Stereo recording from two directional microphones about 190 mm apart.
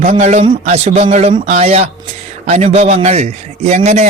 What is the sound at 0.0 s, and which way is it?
A man's voice, 40° right (ahead or behind).